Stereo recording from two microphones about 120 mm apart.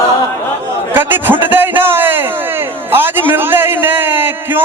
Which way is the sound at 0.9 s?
15° right (ahead or behind).